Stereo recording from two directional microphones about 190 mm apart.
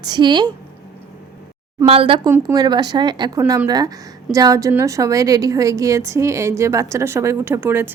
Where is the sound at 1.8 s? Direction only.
30° right (ahead or behind).